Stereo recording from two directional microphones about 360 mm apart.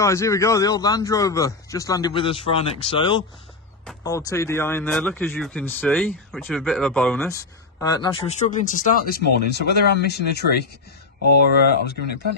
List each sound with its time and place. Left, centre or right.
0.0 s a man's voice: centre; by 12.0 s left